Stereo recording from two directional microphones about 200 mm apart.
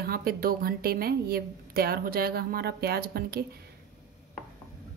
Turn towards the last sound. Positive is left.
turn(degrees=-50)  # may be behind; listen again after turning